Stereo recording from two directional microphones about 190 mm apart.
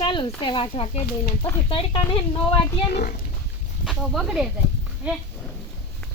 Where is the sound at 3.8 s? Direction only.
Centre (ahead or behind).